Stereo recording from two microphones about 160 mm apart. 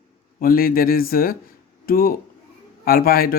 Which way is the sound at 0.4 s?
65° left (ahead or behind).